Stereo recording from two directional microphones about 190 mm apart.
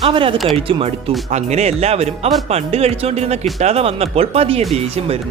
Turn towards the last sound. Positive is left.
turn(degrees=-30)  # may be behind; listen again after turning